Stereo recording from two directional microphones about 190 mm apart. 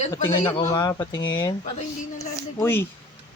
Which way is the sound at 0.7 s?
15° left (ahead or behind).